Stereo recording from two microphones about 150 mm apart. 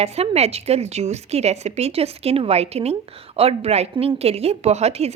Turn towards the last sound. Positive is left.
turn(degrees=-45)  # may be behind; listen again after turning